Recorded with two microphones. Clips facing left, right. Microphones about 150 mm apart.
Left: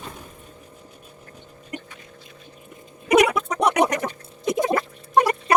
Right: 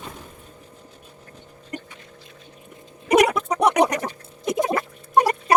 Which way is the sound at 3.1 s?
35° right (ahead or behind).